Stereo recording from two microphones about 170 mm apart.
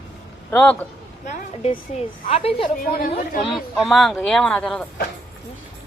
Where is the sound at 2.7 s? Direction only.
55° left (ahead or behind).